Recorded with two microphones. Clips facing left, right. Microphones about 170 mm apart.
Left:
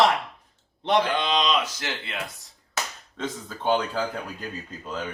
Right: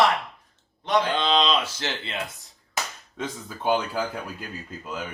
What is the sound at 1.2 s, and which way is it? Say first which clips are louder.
Speech: right 1 dB; 30° right (ahead or behind).